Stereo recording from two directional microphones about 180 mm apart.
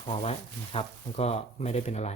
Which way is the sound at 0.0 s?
35° left (ahead or behind).